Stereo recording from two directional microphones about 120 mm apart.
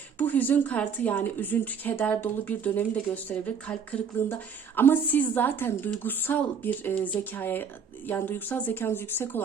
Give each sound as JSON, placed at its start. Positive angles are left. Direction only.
{"t": 0.2, "sound": "a woman's voice", "side_deg": 15}